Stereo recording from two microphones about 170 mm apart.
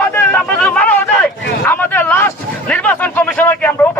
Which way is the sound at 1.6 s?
10° left (ahead or behind).